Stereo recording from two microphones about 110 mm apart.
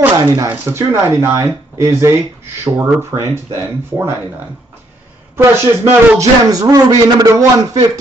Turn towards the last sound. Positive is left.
turn(degrees=-30)  # may be behind; listen again after turning